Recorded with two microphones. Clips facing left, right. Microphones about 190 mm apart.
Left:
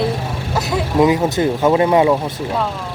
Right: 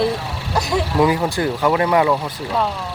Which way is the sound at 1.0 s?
20° left (ahead or behind).